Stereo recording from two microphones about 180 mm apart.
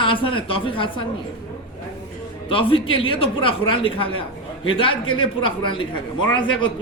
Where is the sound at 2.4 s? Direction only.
30° left (ahead or behind).